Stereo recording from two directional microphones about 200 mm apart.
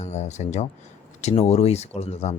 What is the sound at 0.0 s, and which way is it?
Speech, 35° left (ahead or behind).